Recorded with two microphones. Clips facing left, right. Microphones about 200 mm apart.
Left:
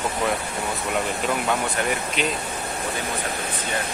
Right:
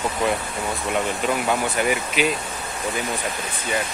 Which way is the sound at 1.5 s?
5° right (ahead or behind).